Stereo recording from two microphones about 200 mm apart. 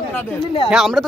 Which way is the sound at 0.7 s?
Centre (ahead or behind).